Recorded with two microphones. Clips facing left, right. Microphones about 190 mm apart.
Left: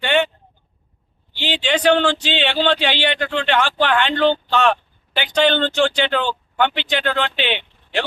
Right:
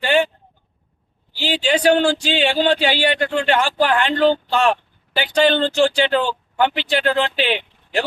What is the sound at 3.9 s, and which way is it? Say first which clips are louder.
Speech: right 1 dB; 35° right (ahead or behind).